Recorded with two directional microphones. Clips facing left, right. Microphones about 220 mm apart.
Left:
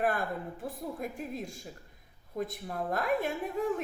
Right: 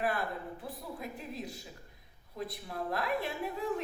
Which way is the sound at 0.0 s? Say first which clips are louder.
Left 3 dB; 45° left (ahead or behind).